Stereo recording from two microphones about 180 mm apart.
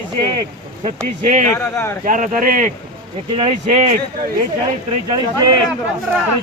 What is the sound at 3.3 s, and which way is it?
Speech, 35° right (ahead or behind).